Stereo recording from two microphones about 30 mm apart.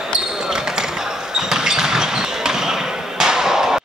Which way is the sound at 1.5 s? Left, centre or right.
Centre.